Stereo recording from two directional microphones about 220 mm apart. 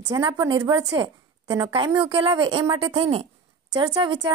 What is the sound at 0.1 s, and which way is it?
A woman's voice, 20° right (ahead or behind).